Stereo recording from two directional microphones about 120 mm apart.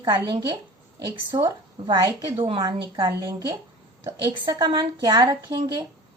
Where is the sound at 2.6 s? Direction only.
35° right (ahead or behind).